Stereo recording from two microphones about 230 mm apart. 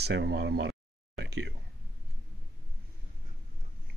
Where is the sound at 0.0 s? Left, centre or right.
Right.